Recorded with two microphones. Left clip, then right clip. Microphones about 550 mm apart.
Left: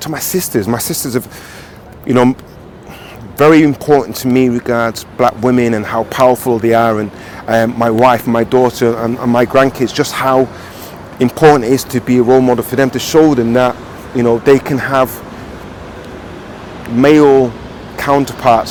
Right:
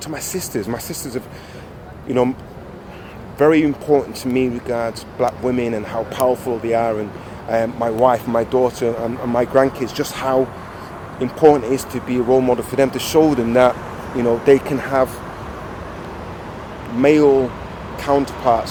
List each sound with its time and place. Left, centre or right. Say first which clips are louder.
0.0 s speech: left 8 dB; left
3.3 s speech: left 6 dB; left
17.0 s speech: left 6 dB; left